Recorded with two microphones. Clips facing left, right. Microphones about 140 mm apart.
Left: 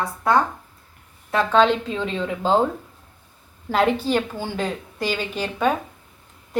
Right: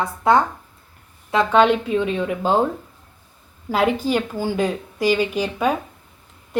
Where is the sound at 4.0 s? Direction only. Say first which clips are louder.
Right 2 dB; 10° right (ahead or behind).